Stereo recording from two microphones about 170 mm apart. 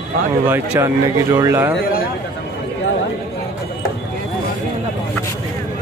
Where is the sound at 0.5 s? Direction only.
15° right (ahead or behind).